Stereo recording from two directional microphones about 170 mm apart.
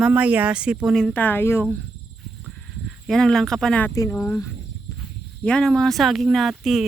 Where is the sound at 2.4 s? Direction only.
Centre (ahead or behind).